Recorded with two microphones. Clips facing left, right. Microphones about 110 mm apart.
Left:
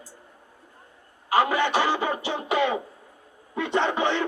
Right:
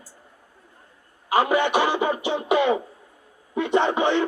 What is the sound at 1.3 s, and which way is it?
Speech, 15° right (ahead or behind).